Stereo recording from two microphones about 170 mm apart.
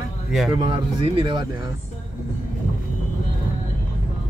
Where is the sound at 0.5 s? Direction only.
30° right (ahead or behind).